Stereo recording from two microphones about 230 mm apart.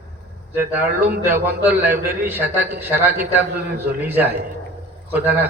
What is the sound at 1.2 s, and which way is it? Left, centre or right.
A man's voice, centre.